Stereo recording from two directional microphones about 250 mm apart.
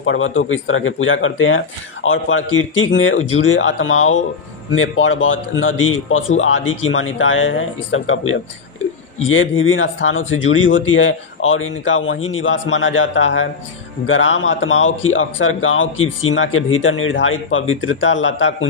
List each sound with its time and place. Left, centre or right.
0.0 s speech: left